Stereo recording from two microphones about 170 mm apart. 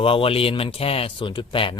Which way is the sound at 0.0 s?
35° left (ahead or behind).